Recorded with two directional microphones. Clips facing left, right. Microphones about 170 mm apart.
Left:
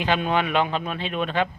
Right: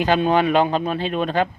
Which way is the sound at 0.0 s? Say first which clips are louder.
Right 5 dB; 40° right (ahead or behind).